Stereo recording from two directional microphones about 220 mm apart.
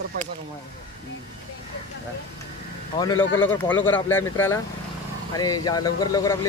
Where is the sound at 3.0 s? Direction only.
15° left (ahead or behind).